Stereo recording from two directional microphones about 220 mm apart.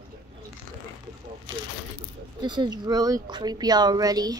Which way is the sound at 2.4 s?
20° right (ahead or behind).